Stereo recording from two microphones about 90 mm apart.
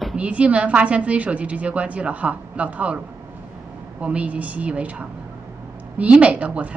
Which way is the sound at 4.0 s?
15° right (ahead or behind).